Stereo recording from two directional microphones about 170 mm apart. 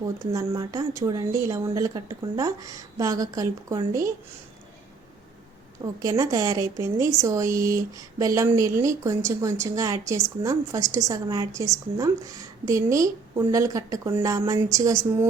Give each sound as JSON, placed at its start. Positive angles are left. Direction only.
{"t": 0.0, "sound": "a woman's voice", "side_deg": -20}
{"t": 5.8, "sound": "a woman's voice", "side_deg": -20}